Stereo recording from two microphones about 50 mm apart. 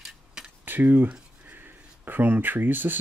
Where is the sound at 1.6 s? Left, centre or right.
Right.